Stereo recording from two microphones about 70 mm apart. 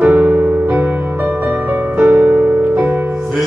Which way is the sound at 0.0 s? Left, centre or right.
Right.